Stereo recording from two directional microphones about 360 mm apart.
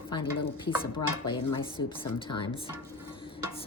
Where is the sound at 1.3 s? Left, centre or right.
Centre.